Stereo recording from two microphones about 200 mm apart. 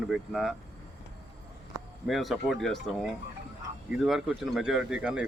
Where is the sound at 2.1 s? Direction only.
Centre (ahead or behind).